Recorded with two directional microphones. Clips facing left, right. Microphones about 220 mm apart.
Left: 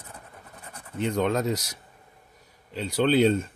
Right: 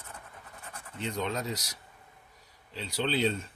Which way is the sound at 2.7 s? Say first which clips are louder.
Left 9 dB; 50° left (ahead or behind).